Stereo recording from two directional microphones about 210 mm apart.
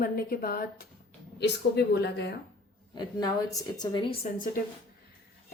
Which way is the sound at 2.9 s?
20° left (ahead or behind).